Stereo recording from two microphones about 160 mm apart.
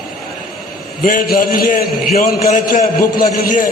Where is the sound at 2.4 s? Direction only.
50° left (ahead or behind).